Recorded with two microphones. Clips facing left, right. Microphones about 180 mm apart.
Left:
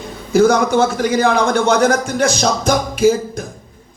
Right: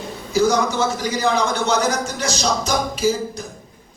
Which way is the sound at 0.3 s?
55° left (ahead or behind).